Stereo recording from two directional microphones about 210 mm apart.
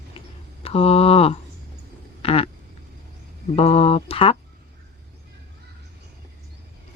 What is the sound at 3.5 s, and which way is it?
Speech, 30° left (ahead or behind).